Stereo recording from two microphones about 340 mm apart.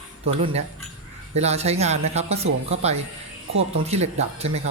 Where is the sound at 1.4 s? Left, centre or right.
Centre.